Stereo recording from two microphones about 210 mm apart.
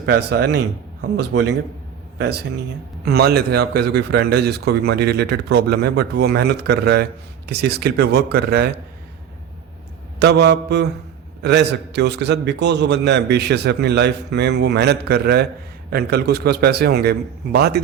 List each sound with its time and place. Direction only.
0.0 s a man's voice: 50° right (ahead or behind)
3.0 s a man's voice: 50° right (ahead or behind)
10.2 s a man's voice: 55° right (ahead or behind)